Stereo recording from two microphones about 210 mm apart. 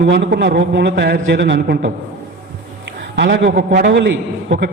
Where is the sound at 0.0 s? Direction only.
55° right (ahead or behind).